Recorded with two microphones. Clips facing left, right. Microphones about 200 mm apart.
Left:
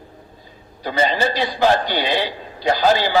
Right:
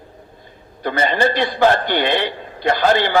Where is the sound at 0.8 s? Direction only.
55° right (ahead or behind).